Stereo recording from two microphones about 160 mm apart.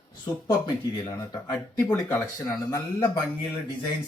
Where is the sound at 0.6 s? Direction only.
20° left (ahead or behind).